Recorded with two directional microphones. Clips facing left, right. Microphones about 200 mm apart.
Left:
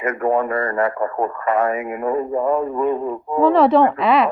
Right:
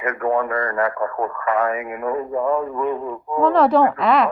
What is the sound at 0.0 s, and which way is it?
Speech, 25° left (ahead or behind).